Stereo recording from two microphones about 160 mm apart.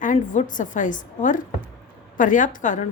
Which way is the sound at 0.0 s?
55° left (ahead or behind).